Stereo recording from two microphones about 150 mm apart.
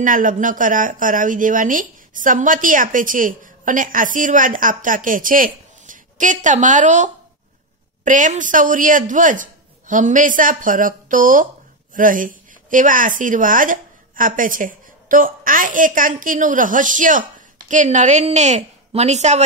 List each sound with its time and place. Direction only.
0.0 s speech: 60° right (ahead or behind)